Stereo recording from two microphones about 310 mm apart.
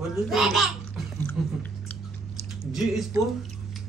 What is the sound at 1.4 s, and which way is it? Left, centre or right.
Chewing, centre.